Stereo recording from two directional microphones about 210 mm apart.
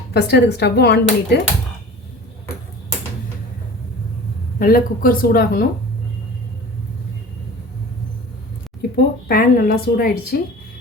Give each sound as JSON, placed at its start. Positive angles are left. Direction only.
{"t": 0.1, "sound": "speech", "side_deg": 50}
{"t": 4.6, "sound": "speech", "side_deg": 45}
{"t": 9.2, "sound": "speech", "side_deg": 45}